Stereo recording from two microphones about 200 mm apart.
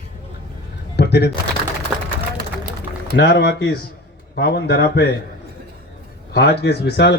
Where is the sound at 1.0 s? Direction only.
55° left (ahead or behind).